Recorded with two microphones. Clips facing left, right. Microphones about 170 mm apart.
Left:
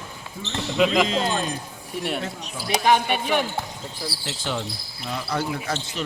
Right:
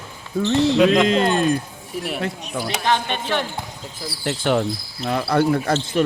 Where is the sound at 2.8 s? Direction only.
10° left (ahead or behind).